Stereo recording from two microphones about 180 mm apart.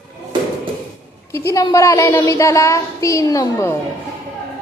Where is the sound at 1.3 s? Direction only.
15° left (ahead or behind).